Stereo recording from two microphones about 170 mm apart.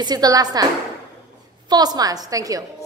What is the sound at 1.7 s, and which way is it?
Speech, 25° right (ahead or behind).